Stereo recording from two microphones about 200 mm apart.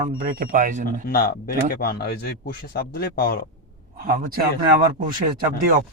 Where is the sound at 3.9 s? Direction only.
45° right (ahead or behind).